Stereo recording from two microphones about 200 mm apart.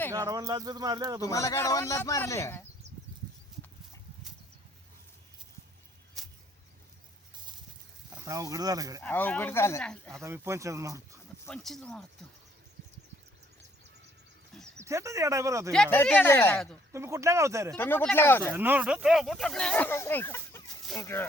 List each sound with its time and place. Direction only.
0.3 s speech: 15° right (ahead or behind)
1.2 s speech: 15° left (ahead or behind)
6.2 s a sound: centre (ahead or behind)
8.1 s speech: 15° right (ahead or behind)
9.0 s speech: 10° left (ahead or behind)
10.1 s speech: 15° right (ahead or behind)
11.4 s speech: centre (ahead or behind)
14.8 s speech: 15° right (ahead or behind)
15.7 s speech: 5° left (ahead or behind)
16.9 s speech: 15° right (ahead or behind)
17.7 s speech: 10° left (ahead or behind)
18.5 s speech: 10° right (ahead or behind); by 21.2 s 15° left (ahead or behind)